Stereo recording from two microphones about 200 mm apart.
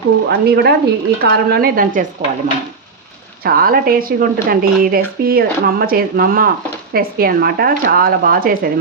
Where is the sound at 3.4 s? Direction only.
50° right (ahead or behind).